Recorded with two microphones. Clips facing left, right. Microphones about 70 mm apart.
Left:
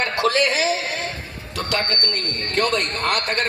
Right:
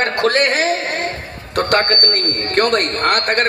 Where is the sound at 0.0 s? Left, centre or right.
Right.